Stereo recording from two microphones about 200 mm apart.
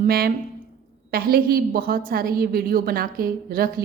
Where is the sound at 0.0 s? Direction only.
50° right (ahead or behind).